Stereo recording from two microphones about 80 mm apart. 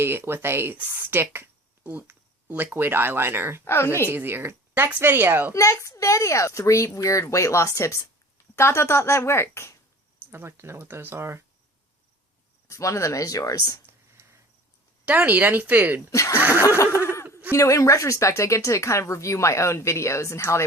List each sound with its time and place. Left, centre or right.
0.0 s speech: right
1.8 s a sound: right
2.7 s speech: right
3.6 s speech: left
4.1 s speech: right
5.5 s speech: left
10.2 s speech: right
12.6 s speech: left
13.9 s a sound: right
15.0 s speech: centre
16.1 s speech: left
16.4 s snicker: right
16.6 s speech: left